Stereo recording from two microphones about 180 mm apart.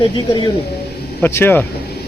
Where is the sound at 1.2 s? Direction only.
10° left (ahead or behind).